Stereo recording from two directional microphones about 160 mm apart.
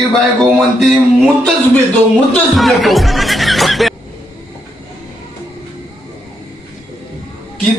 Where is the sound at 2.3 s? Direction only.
Centre (ahead or behind).